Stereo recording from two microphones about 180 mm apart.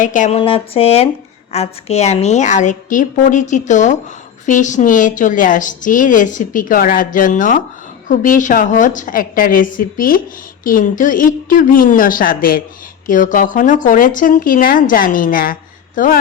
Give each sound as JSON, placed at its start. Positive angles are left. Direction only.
{"t": 0.0, "sound": "a woman's voice", "side_deg": 45}
{"t": 0.3, "sound": "a sound", "side_deg": 30}
{"t": 1.5, "sound": "a woman's voice", "side_deg": 35}